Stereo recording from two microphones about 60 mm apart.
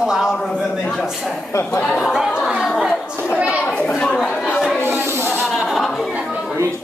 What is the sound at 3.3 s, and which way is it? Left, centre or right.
Children playing, centre.